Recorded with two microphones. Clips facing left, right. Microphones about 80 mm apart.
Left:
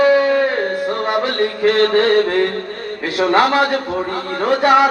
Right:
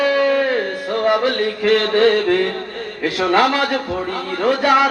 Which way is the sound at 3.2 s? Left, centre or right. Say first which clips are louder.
Left 2 dB; left.